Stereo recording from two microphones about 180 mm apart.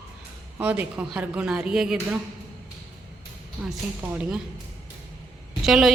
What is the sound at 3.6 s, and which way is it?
Speech, 5° right (ahead or behind).